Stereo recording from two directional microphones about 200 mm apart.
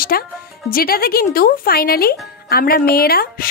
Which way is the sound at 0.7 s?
45° left (ahead or behind).